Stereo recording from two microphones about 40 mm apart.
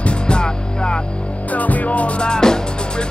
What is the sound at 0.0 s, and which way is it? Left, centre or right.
Music, left.